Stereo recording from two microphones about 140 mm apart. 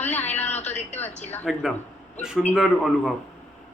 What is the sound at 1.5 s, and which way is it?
A man's voice, centre (ahead or behind).